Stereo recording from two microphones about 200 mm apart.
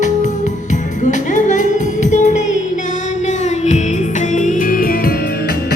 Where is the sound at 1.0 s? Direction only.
40° left (ahead or behind).